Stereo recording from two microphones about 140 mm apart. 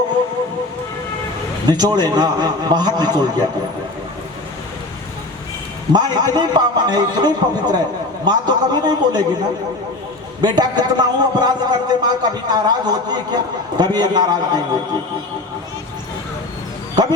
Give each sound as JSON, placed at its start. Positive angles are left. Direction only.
{"t": 1.7, "sound": "a man's voice", "side_deg": -30}
{"t": 5.9, "sound": "a man's voice", "side_deg": -30}